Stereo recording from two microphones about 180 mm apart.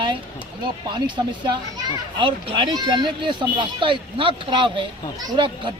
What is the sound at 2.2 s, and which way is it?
Speech, 30° right (ahead or behind).